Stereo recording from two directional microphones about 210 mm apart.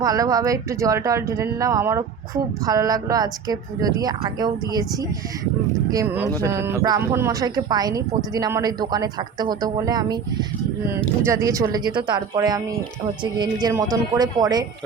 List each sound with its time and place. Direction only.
0.0 s speech: 15° right (ahead or behind)
5.9 s speech: 15° right (ahead or behind)
11.3 s speech: 15° right (ahead or behind)